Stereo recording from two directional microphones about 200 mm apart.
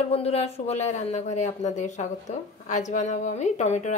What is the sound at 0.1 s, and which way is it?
Speech, 30° left (ahead or behind).